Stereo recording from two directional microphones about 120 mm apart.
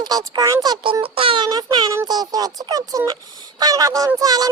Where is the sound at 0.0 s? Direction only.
30° right (ahead or behind).